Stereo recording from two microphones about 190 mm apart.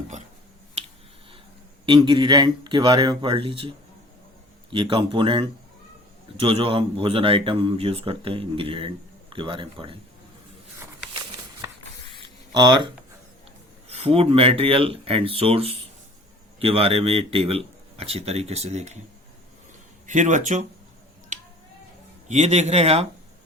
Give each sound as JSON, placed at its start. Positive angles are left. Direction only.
{"t": 1.9, "sound": "speech", "side_deg": -25}
{"t": 12.5, "sound": "a man's voice", "side_deg": -25}
{"t": 20.1, "sound": "a man's voice", "side_deg": -40}
{"t": 22.3, "sound": "a man's voice", "side_deg": -35}